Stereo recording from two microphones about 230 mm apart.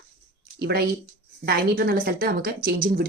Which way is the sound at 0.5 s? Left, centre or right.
Right.